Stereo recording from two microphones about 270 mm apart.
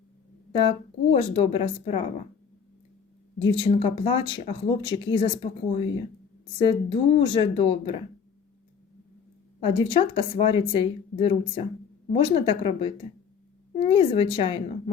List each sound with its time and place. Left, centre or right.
0.6 s speech: centre
3.4 s speech: centre
9.6 s speech: centre